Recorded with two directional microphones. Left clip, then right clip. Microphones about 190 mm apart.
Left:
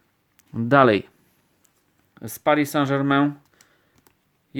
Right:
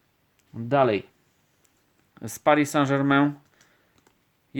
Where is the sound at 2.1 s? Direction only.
5° left (ahead or behind).